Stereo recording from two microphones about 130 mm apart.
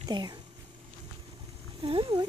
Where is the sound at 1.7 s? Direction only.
45° right (ahead or behind).